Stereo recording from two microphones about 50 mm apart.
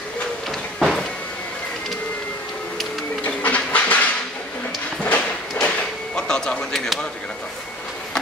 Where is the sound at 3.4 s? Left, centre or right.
Left.